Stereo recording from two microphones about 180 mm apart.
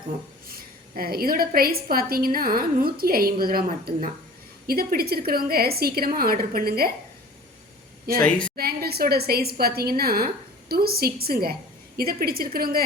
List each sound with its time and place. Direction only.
0.5 s a woman's voice: 55° right (ahead or behind)
8.2 s a woman's voice: 5° left (ahead or behind)
8.5 s a woman's voice: 60° right (ahead or behind)